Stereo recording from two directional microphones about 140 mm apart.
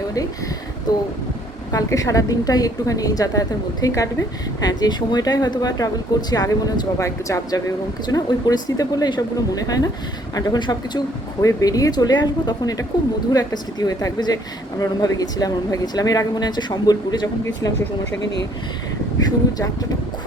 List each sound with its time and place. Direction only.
0.9 s a woman's voice: 30° left (ahead or behind)
19.2 s a woman's voice: 25° left (ahead or behind)